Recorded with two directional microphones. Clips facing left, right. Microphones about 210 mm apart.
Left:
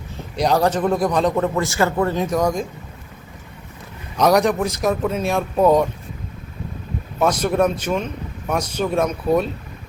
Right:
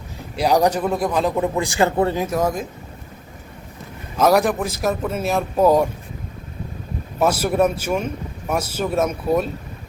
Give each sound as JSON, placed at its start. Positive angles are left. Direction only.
{"t": 0.3, "sound": "speech", "side_deg": -10}
{"t": 1.4, "sound": "speech", "side_deg": -15}
{"t": 2.1, "sound": "speech", "side_deg": -5}
{"t": 4.2, "sound": "speech", "side_deg": -5}
{"t": 7.2, "sound": "speech", "side_deg": -5}